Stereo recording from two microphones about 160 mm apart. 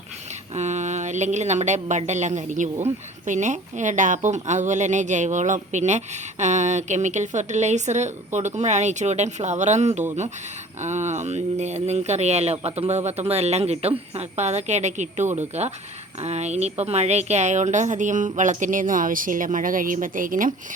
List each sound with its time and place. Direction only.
0.5 s speech: 45° right (ahead or behind)